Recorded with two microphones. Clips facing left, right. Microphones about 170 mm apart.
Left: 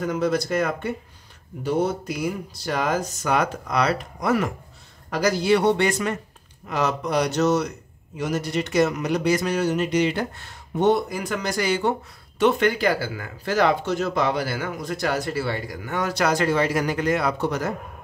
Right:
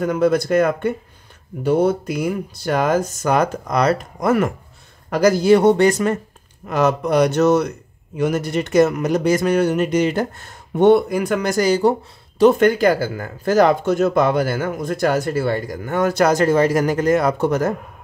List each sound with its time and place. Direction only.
0.0 s speech: 55° right (ahead or behind)
6.7 s speech: 55° right (ahead or behind)